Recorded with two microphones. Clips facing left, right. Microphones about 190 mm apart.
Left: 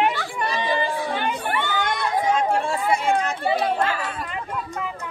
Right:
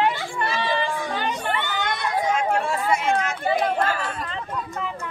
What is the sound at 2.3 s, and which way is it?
Chatter, 30° left (ahead or behind).